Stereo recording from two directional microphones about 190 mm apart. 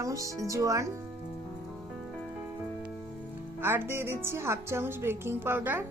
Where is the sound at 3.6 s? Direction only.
10° right (ahead or behind).